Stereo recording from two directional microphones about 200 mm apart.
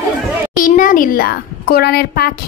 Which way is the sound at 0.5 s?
40° left (ahead or behind).